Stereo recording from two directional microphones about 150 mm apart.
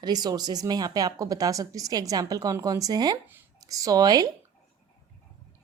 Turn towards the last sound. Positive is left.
turn(degrees=-25)  # may be behind; listen again after turning